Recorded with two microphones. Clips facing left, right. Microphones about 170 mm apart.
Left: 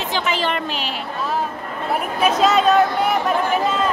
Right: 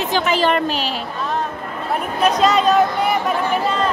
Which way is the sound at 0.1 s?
45° right (ahead or behind).